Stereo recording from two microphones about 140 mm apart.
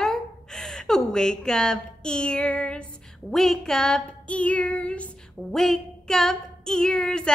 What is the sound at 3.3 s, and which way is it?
Female singing, 5° left (ahead or behind).